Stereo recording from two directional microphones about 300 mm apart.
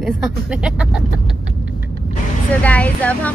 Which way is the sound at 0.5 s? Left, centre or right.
Centre.